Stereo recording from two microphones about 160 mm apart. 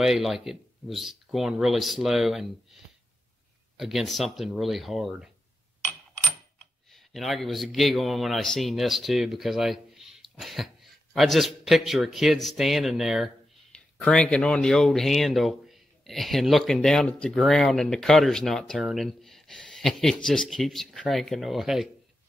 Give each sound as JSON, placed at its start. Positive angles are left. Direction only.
{"t": 0.0, "sound": "a man's voice", "side_deg": 0}
{"t": 6.9, "sound": "a man's voice", "side_deg": 0}